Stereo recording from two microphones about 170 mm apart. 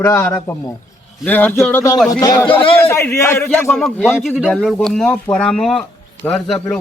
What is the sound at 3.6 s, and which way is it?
Speech, centre (ahead or behind).